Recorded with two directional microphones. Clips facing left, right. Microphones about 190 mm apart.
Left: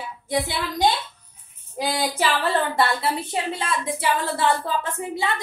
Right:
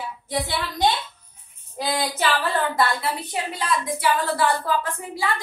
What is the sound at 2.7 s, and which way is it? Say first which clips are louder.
A woman's voice: left 1 dB; 30° left (ahead or behind).